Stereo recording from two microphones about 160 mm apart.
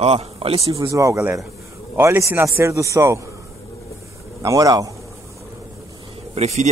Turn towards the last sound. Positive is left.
turn(degrees=-45)  # may be behind; listen again after turning